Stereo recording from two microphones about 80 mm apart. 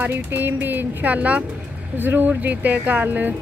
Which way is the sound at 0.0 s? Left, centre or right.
Right.